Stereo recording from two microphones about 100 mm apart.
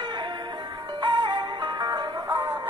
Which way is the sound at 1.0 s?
50° right (ahead or behind).